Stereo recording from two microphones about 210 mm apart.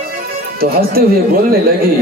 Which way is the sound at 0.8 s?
45° right (ahead or behind).